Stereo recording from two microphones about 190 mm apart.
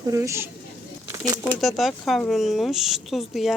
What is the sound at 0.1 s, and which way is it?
Speech, 15° right (ahead or behind).